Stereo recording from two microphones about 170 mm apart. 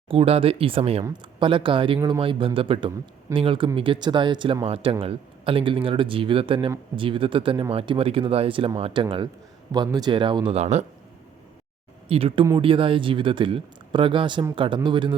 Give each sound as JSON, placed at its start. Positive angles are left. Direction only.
{"t": 0.1, "sound": "speech", "side_deg": -35}
{"t": 2.0, "sound": "speech", "side_deg": -20}
{"t": 2.2, "sound": "speech", "side_deg": -30}
{"t": 12.0, "sound": "speech", "side_deg": -35}